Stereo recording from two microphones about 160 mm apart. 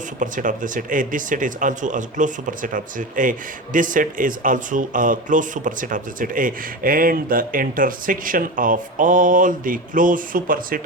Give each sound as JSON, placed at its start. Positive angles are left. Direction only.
{"t": 0.2, "sound": "speech", "side_deg": -55}